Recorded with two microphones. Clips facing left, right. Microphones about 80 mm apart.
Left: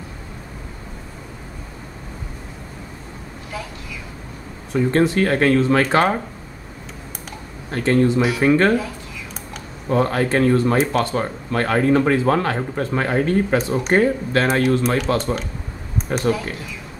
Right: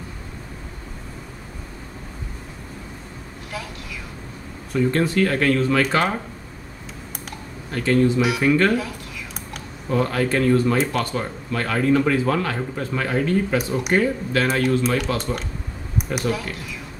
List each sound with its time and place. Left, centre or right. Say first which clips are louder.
4.7 s speech: left 2 dB; left
7.7 s speech: left 2 dB; left
9.8 s speech: left 3 dB; left
16.2 s speech: left 5 dB; centre